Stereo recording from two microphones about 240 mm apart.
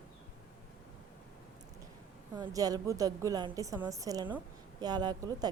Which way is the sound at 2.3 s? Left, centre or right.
Centre.